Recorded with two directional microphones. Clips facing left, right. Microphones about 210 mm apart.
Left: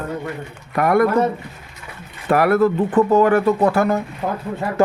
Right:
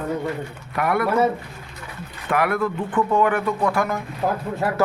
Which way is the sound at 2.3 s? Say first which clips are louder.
Left 7 dB; 40° left (ahead or behind).